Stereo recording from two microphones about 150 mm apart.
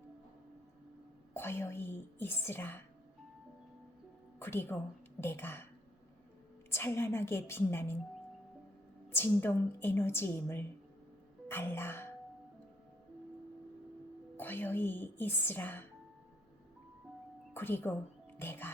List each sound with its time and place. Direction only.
1.3 s a woman's voice: 15° left (ahead or behind)
4.4 s a woman's voice: 15° left (ahead or behind)
6.7 s a woman's voice: 15° left (ahead or behind)
9.0 s a woman's voice: 15° left (ahead or behind)
14.3 s a woman's voice: 10° left (ahead or behind)
17.5 s a woman's voice: 15° left (ahead or behind)